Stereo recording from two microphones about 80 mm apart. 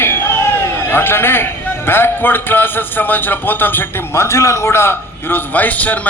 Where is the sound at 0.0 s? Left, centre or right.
Left.